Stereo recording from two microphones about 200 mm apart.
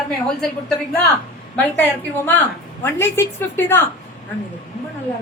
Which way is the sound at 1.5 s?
10° left (ahead or behind).